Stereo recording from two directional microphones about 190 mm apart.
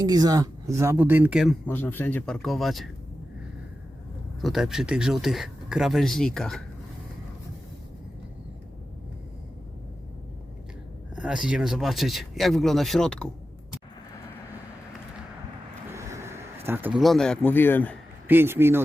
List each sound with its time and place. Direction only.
0.0 s speech: 20° right (ahead or behind); by 1.7 s 5° right (ahead or behind)
1.7 s speech: 10° left (ahead or behind)
4.4 s speech: centre (ahead or behind)
11.1 s speech: 5° right (ahead or behind)
15.9 s vehicle: 15° right (ahead or behind)
16.6 s speech: 10° right (ahead or behind); by 17.9 s 10° left (ahead or behind)
18.3 s speech: 10° right (ahead or behind)